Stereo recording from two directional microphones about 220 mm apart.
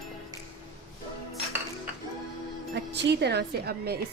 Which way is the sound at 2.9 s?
50° right (ahead or behind).